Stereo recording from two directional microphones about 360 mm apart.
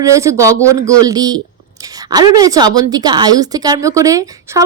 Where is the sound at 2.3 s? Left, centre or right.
Centre.